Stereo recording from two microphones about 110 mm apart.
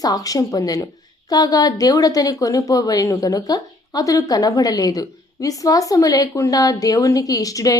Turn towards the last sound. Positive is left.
turn(degrees=30)  # may be behind; listen again after turning